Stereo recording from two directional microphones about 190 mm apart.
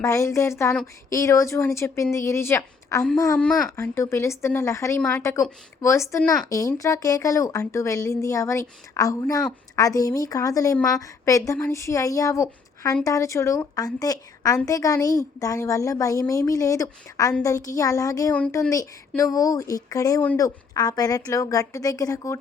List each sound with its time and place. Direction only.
0.0 s a woman's voice: 15° left (ahead or behind)